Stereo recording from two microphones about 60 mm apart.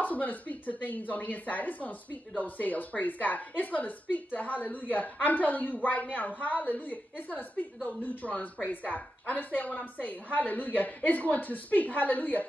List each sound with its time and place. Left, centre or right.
0.0 s speech: left